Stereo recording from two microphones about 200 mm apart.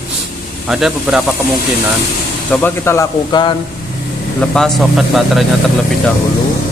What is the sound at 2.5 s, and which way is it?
Speech, 10° left (ahead or behind).